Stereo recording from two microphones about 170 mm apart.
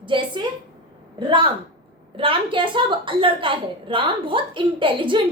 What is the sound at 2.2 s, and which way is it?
A woman's voice, 30° right (ahead or behind).